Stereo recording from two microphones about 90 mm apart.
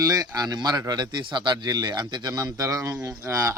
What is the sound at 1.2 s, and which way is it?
Speech, 60° right (ahead or behind).